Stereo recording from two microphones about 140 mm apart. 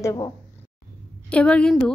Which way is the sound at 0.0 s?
25° left (ahead or behind).